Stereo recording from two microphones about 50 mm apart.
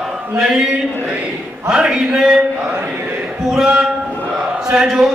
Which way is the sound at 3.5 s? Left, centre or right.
Centre.